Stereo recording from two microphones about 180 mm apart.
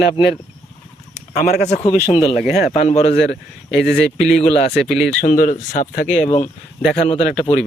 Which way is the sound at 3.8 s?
Centre (ahead or behind).